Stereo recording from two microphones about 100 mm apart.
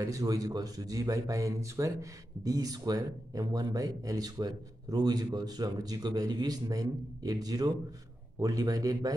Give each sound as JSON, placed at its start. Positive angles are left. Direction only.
{"t": 0.0, "sound": "speech", "side_deg": -35}